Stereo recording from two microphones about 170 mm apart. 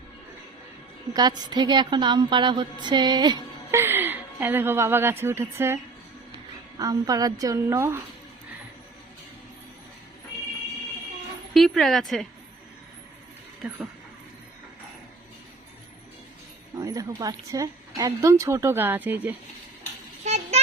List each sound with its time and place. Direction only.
1.1 s a woman's voice: 25° right (ahead or behind)
11.5 s speech: centre (ahead or behind)
13.6 s speech: 5° right (ahead or behind)
16.7 s speech: 20° right (ahead or behind)
20.2 s vehicle: 40° right (ahead or behind)